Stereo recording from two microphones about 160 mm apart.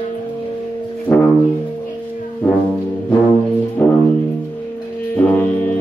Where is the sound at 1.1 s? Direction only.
10° left (ahead or behind).